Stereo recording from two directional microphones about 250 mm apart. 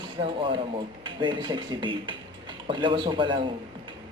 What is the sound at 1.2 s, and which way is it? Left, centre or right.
Speech, centre.